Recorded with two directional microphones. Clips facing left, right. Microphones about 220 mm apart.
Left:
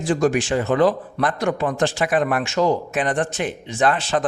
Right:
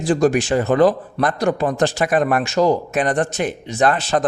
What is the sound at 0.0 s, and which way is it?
A man's voice, 35° right (ahead or behind).